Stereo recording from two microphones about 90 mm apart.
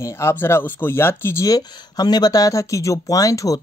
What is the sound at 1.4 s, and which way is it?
Speech, 45° left (ahead or behind).